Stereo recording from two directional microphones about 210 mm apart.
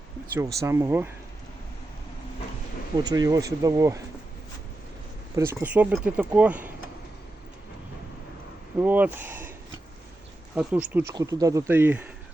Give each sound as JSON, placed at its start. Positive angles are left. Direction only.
{"t": 0.3, "sound": "speech", "side_deg": -15}
{"t": 3.0, "sound": "speech", "side_deg": -20}
{"t": 5.4, "sound": "speech", "side_deg": -10}
{"t": 8.8, "sound": "speech", "side_deg": -10}
{"t": 10.5, "sound": "speech", "side_deg": -5}
{"t": 11.1, "sound": "speech", "side_deg": -15}